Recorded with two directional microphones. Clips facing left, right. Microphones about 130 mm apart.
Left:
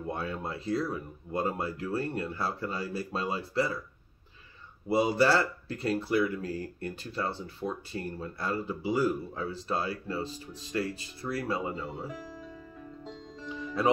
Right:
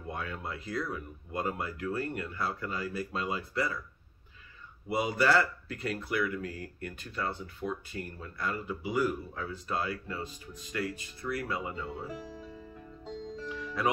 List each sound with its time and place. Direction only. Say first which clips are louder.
0.0 s speech: left 4 dB; 30° left (ahead or behind)
4.8 s speech: left 3 dB; 30° left (ahead or behind)
13.8 s speech: left 5 dB; 30° left (ahead or behind)